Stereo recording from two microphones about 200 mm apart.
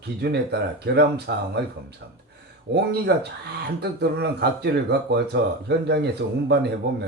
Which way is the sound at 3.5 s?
55° right (ahead or behind).